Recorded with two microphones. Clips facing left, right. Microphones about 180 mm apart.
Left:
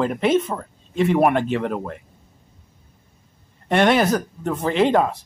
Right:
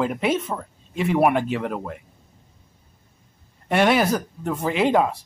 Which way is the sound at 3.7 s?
5° right (ahead or behind).